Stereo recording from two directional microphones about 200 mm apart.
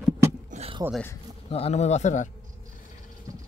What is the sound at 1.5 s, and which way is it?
Speech, 30° left (ahead or behind).